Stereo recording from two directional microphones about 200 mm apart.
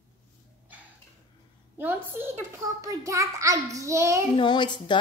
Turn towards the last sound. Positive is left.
turn(degrees=25)  # may be behind; listen again after turning